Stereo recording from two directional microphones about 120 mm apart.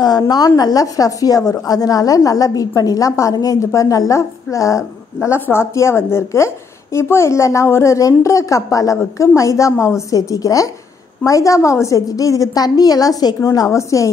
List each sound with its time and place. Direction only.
0.0 s a woman's voice: 35° left (ahead or behind)